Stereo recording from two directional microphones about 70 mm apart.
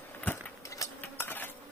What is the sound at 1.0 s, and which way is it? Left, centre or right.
Insect, left.